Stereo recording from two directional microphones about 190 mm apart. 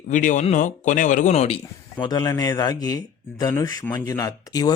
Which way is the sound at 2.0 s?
20° left (ahead or behind).